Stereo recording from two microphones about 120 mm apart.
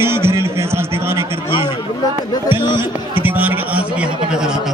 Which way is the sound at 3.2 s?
15° right (ahead or behind).